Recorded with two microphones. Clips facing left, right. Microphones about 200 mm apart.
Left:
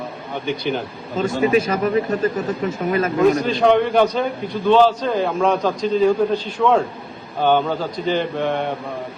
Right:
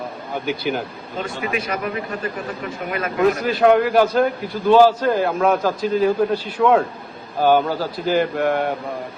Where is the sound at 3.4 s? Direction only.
5° right (ahead or behind).